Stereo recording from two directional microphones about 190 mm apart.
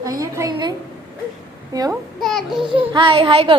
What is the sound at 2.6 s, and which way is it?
Speech, 25° right (ahead or behind).